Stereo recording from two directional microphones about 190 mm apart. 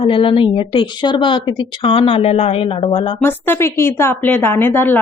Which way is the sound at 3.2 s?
10° left (ahead or behind).